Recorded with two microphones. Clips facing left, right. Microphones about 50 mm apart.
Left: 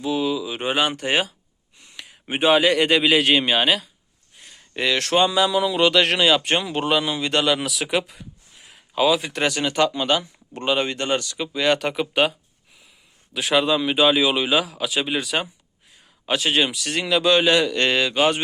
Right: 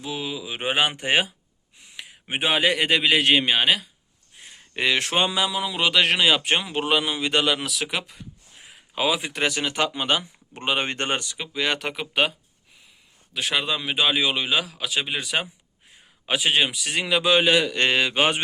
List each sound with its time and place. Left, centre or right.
0.0 s speech: centre
1.8 s a man's voice: centre
4.4 s speech: right; by 8.3 s centre
8.7 s speech: centre
10.8 s speech: right
11.2 s speech: centre
17.8 s speech: centre